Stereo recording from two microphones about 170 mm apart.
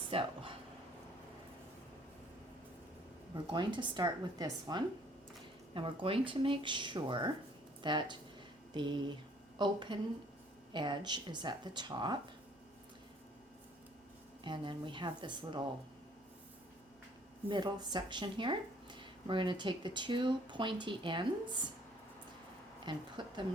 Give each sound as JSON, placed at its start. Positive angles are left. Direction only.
{"t": 0.1, "sound": "a sound", "side_deg": -30}
{"t": 3.5, "sound": "speech", "side_deg": -25}
{"t": 14.4, "sound": "speech", "side_deg": -30}
{"t": 17.5, "sound": "speech", "side_deg": -25}
{"t": 22.9, "sound": "speech", "side_deg": -25}